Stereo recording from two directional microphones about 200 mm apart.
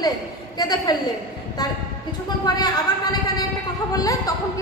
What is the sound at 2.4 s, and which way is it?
A woman's voice, 20° left (ahead or behind).